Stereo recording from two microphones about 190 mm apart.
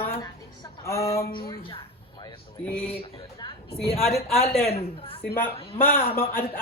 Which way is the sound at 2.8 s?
25° left (ahead or behind).